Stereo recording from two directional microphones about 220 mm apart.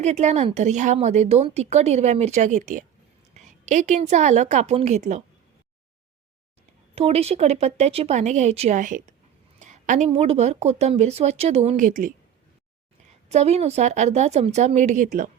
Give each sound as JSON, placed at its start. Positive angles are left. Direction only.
{"t": 0.0, "sound": "a woman's voice", "side_deg": -30}
{"t": 6.9, "sound": "speech", "side_deg": -25}
{"t": 13.2, "sound": "a woman's voice", "side_deg": -30}